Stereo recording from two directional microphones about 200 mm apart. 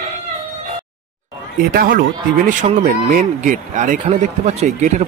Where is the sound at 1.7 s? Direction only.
45° right (ahead or behind).